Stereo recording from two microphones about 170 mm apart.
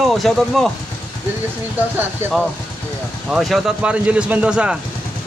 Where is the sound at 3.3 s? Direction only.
Centre (ahead or behind).